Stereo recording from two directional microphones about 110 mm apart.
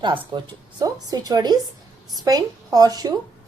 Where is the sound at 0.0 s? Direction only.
45° right (ahead or behind).